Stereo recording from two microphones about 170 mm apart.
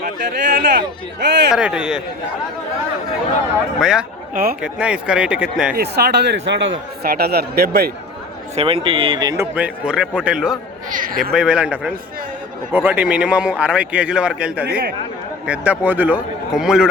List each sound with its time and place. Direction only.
0.0 s speech: 80° right
1.5 s speech: 5° right (ahead or behind)
3.8 s speech: 5° right (ahead or behind)
5.7 s a man's voice: 70° right (ahead or behind)
8.5 s speech: 35° right (ahead or behind)
9.6 s speech: 5° right (ahead or behind)
10.8 s speech: 50° right (ahead or behind)
11.2 s speech: centre (ahead or behind)